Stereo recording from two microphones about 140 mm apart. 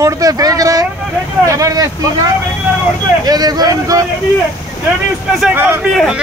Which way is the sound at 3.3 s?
30° right (ahead or behind).